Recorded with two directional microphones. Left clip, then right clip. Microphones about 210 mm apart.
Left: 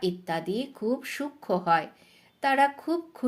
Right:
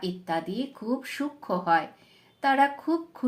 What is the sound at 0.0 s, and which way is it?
Speech, 45° left (ahead or behind).